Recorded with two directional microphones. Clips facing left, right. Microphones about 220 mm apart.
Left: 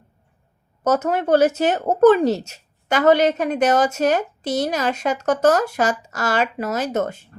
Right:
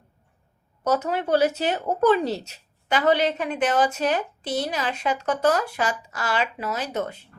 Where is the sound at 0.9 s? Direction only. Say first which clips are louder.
Left 5 dB; 45° left (ahead or behind).